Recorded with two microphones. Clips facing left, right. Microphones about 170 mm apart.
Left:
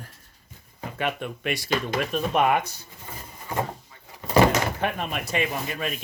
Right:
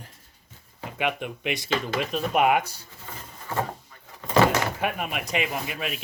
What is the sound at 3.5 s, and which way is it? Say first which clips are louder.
Speech: even; 15° left (ahead or behind).